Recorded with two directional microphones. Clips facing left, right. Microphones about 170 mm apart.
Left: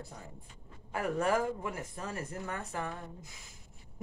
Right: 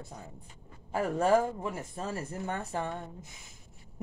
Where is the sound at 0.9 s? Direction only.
25° right (ahead or behind).